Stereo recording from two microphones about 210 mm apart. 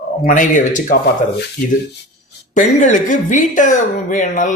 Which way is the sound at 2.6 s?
40° left (ahead or behind).